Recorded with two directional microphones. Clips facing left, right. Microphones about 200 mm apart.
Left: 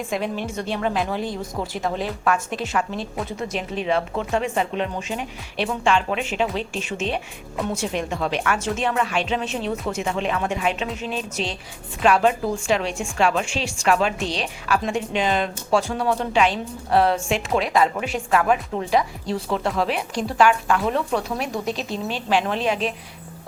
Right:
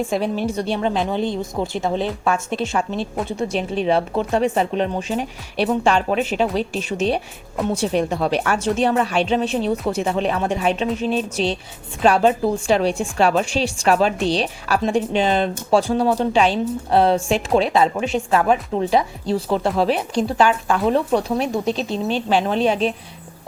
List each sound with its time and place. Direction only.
0.1 s a woman's voice: 30° right (ahead or behind)